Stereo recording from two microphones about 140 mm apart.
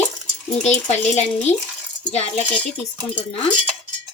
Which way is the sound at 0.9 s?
55° left (ahead or behind).